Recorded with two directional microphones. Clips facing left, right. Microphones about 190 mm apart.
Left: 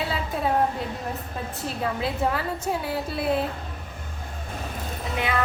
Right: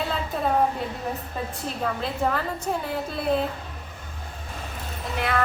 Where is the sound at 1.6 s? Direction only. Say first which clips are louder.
Left 2 dB; 5° left (ahead or behind).